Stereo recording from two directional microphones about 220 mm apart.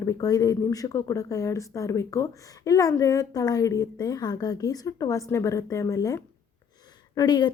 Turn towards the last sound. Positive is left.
turn(degrees=20)  # may be behind; listen again after turning